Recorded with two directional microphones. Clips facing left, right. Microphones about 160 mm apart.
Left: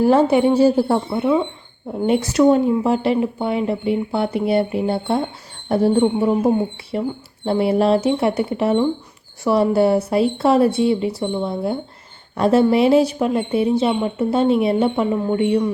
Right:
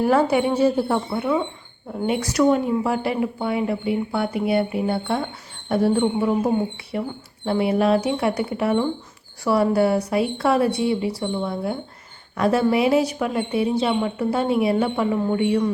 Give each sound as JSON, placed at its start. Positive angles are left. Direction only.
{"t": 0.0, "sound": "speech", "side_deg": 25}
{"t": 1.1, "sound": "speech", "side_deg": 20}